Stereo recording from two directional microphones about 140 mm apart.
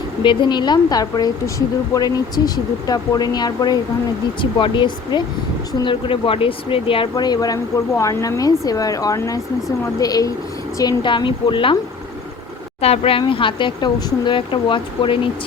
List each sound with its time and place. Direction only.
0.2 s speech: 35° left (ahead or behind)
12.8 s speech: 45° left (ahead or behind)